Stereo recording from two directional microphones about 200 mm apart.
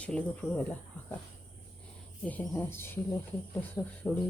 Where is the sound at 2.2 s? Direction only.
10° left (ahead or behind).